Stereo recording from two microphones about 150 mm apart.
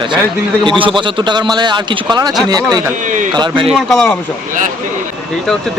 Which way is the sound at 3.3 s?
30° right (ahead or behind).